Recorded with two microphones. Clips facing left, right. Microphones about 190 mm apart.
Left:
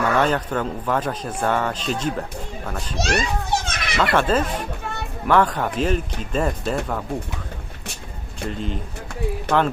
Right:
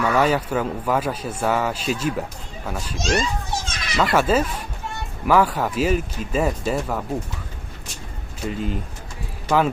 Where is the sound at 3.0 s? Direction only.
65° left (ahead or behind).